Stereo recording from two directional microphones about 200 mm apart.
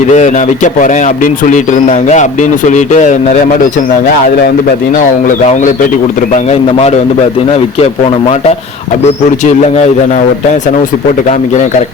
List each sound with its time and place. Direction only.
0.1 s speech: 35° left (ahead or behind)
6.5 s speech: 30° left (ahead or behind)